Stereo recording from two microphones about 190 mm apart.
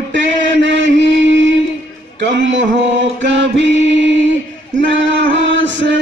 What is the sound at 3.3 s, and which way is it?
Chant, 70° right (ahead or behind).